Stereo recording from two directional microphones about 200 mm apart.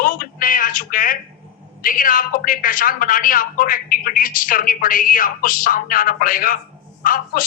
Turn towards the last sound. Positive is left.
turn(degrees=45)  # may be behind; listen again after turning